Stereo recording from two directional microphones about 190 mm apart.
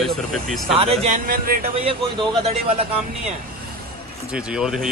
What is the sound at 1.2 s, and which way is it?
Speech, 50° right (ahead or behind).